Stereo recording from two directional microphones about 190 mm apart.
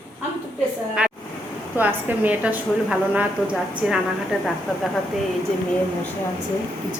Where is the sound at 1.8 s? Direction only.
10° right (ahead or behind).